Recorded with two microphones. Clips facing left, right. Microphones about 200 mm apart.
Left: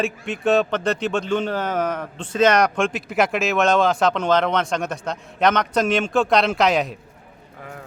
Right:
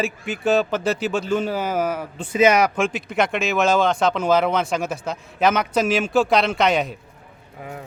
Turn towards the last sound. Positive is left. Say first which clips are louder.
# even
turn(degrees=0)  # may be behind; listen again after turning